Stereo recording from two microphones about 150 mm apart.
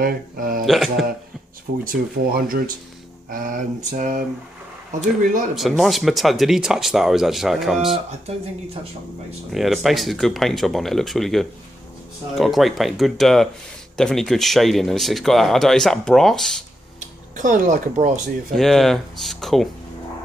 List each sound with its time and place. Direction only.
0.0 s speech: 70° right (ahead or behind)
0.7 s speech: centre (ahead or behind)
1.9 s speech: 75° right (ahead or behind); by 4.2 s 60° right (ahead or behind)
5.6 s speech: centre (ahead or behind)
9.5 s speech: centre (ahead or behind)
17.4 s speech: 55° right (ahead or behind)
18.5 s speech: centre (ahead or behind)